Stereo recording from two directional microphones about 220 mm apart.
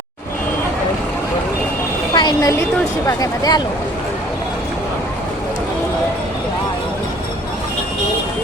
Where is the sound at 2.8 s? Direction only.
15° left (ahead or behind).